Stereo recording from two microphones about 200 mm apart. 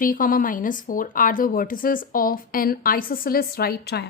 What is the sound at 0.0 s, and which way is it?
Speech, 45° left (ahead or behind).